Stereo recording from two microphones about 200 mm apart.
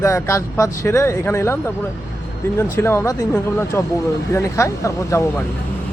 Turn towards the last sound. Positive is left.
turn(degrees=15)  # may be behind; listen again after turning